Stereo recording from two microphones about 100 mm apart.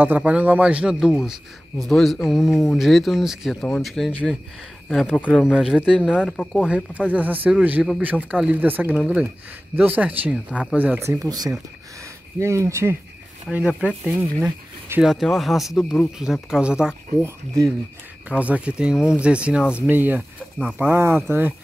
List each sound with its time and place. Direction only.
0.0 s speech: 15° right (ahead or behind); by 5.2 s 5° left (ahead or behind)
5.3 s speech: 5° right (ahead or behind)
6.2 s speech: 10° left (ahead or behind)
6.6 s speech: 10° right (ahead or behind)
11.0 s speech: 30° right (ahead or behind)
11.2 s speech: 40° right (ahead or behind)
12.4 s speech: 30° right (ahead or behind)
13.7 s speech: 10° right (ahead or behind); by 16.1 s 5° left (ahead or behind)
16.2 s speech: 5° right (ahead or behind)
17.2 s speech: 30° right (ahead or behind)
18.3 s speech: 15° right (ahead or behind)